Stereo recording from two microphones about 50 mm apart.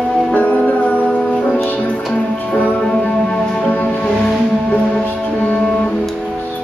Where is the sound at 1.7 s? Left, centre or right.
Left.